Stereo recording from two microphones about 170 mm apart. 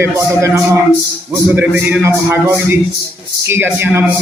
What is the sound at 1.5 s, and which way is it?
A man's voice, 10° right (ahead or behind).